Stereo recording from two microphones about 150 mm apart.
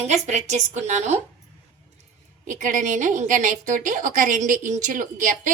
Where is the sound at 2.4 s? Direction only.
55° right (ahead or behind).